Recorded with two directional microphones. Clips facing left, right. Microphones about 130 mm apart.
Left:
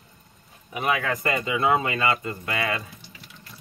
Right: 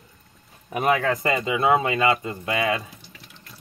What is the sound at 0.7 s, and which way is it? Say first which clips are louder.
Speech: right 4 dB; 45° right (ahead or behind).